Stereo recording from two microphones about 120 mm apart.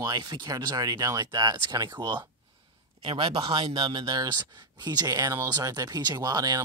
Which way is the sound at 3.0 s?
45° right (ahead or behind).